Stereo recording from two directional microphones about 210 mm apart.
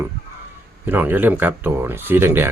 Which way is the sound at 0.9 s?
10° right (ahead or behind).